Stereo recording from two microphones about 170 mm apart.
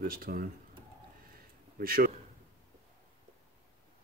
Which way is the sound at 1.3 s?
60° right (ahead or behind).